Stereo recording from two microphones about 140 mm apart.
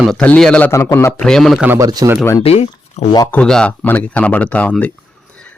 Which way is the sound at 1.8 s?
25° right (ahead or behind).